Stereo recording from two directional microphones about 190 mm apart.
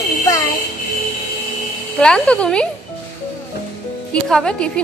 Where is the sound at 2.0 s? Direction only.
5° left (ahead or behind).